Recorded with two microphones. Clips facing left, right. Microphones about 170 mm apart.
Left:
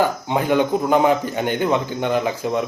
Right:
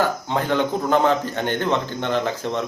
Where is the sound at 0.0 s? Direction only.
15° left (ahead or behind).